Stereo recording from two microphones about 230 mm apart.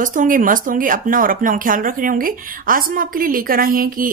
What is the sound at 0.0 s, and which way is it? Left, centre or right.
Speech, right.